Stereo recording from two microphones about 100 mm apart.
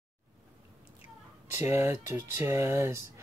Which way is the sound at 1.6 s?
30° right (ahead or behind).